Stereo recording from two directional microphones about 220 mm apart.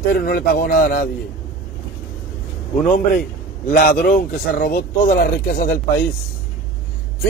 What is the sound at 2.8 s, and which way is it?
A man's voice, 40° left (ahead or behind).